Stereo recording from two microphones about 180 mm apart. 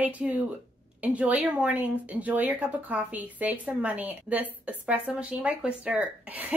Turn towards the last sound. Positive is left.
turn(degrees=-10)  # may be behind; listen again after turning